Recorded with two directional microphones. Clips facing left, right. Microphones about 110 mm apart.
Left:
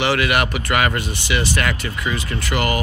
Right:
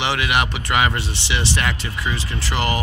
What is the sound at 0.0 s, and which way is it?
Speech, 20° right (ahead or behind).